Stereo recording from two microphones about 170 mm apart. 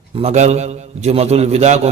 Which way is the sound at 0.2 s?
40° right (ahead or behind).